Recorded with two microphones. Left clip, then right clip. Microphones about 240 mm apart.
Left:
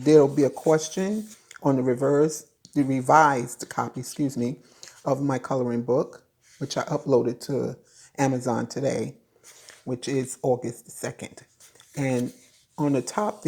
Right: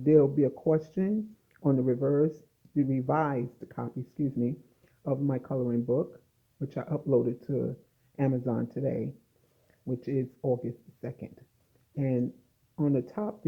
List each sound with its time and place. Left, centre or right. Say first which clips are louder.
0.0 s speech: left 5 dB; left
5.0 s speech: left 6 dB; left
11.9 s speech: left 4 dB; centre